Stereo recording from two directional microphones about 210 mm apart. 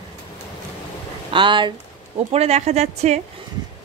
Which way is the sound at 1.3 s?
25° right (ahead or behind).